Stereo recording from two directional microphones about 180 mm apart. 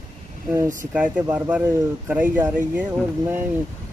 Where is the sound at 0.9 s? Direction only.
5° right (ahead or behind).